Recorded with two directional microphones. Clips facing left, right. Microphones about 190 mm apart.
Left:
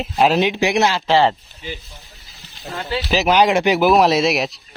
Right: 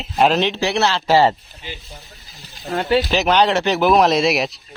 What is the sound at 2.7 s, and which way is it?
Speech, 55° right (ahead or behind).